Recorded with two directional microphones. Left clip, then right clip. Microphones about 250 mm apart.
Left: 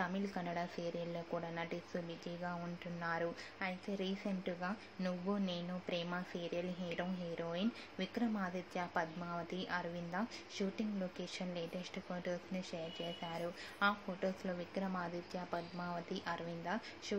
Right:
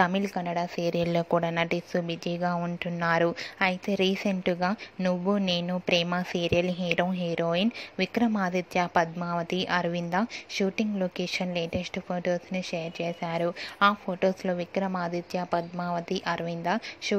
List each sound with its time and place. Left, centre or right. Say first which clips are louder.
0.0 s speech: right 15 dB; right